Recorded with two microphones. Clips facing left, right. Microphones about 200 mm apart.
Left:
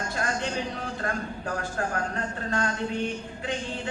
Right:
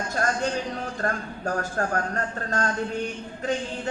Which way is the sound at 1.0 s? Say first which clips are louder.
Right 3 dB; 45° right (ahead or behind).